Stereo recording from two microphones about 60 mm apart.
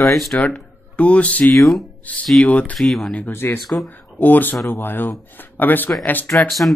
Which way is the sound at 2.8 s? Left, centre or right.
Centre.